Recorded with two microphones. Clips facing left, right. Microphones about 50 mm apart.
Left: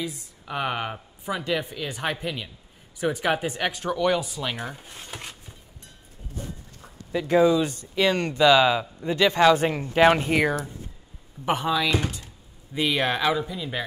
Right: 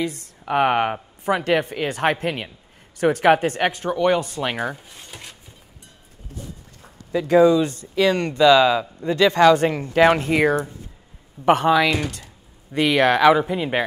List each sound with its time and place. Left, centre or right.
0.0 s speech: right
0.5 s a woman's voice: right
1.2 s a woman's voice: right
3.0 s a woman's voice: right
3.7 s speech: centre
4.4 s speech: right
4.7 s speech: centre
7.1 s speech: right
7.6 s speech: right
8.4 s speech: centre
10.2 s a woman's voice: right
13.4 s a woman's voice: right